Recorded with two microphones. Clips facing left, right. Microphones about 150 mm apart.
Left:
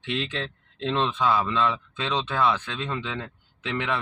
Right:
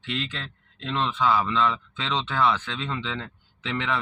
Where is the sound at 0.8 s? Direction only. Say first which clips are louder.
Left 1 dB; 20° left (ahead or behind).